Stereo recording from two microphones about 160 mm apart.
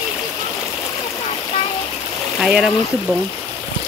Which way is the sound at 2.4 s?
5° right (ahead or behind).